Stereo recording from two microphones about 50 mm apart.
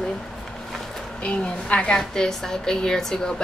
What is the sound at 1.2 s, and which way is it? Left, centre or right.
A woman's voice, left.